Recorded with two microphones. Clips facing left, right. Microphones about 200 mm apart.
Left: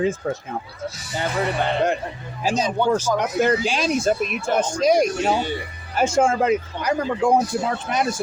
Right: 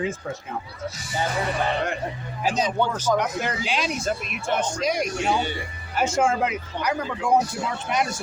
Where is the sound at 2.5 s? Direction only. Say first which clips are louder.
Left 5 dB; 45° left (ahead or behind).